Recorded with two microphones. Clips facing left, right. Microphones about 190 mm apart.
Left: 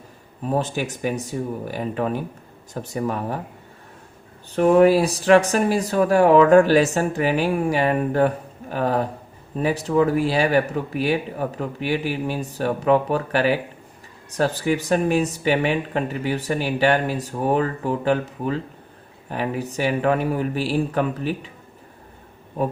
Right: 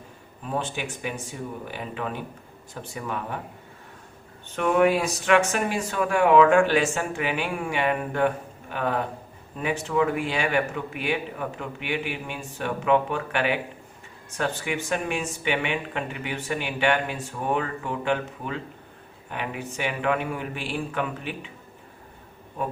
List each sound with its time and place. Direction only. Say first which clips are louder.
0.4 s speech: left 6 dB; 40° left (ahead or behind)
4.4 s speech: left 6 dB; 35° left (ahead or behind)